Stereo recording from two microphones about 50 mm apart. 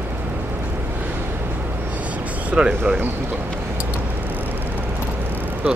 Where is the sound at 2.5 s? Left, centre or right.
Centre.